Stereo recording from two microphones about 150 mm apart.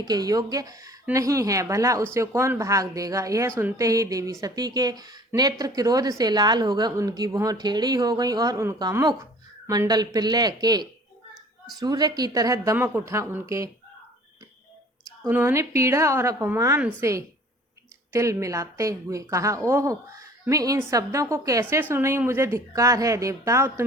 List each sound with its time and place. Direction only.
0.1 s a woman's voice: 25° right (ahead or behind)
15.3 s a woman's voice: 15° right (ahead or behind)